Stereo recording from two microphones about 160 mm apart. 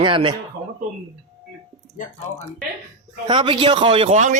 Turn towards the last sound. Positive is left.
turn(degrees=-45)  # may be behind; listen again after turning